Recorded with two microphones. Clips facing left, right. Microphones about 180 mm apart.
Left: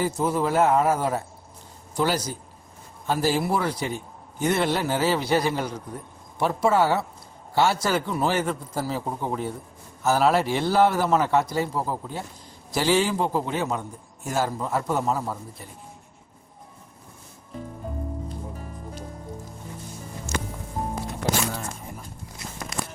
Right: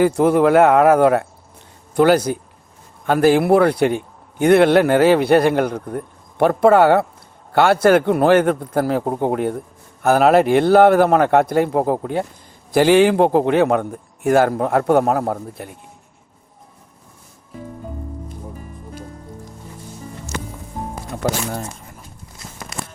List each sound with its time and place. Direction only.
0.0 s a man's voice: 65° right (ahead or behind)